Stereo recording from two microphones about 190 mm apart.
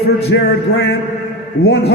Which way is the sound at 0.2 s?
65° left (ahead or behind).